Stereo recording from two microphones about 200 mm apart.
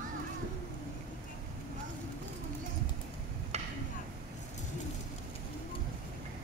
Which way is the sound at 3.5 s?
30° right (ahead or behind).